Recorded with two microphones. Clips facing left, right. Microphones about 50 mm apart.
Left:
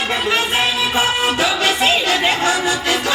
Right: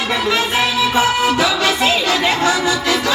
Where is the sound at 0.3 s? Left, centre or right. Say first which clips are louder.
Right 1 dB; left.